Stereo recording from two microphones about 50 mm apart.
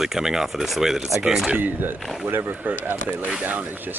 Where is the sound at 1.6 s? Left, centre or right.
Right.